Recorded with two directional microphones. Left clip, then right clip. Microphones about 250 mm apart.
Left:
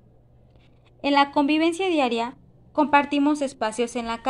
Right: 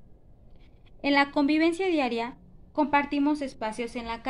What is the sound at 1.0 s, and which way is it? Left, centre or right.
A woman's voice, centre.